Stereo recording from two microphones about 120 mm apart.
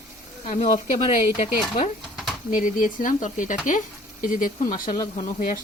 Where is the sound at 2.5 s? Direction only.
90° left.